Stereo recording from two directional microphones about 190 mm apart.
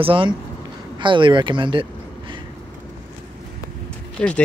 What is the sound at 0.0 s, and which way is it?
Speech, 25° right (ahead or behind).